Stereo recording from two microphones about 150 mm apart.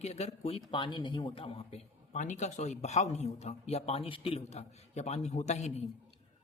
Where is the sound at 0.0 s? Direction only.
45° left (ahead or behind).